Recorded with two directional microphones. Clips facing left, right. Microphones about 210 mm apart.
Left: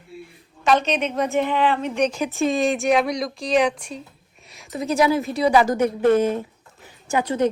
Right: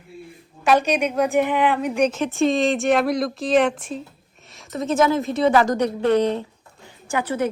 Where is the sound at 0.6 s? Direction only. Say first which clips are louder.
Right 1 dB; 10° right (ahead or behind); by 6.1 s 5° left (ahead or behind).